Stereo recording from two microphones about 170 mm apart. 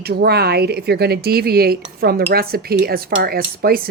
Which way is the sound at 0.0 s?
70° right (ahead or behind).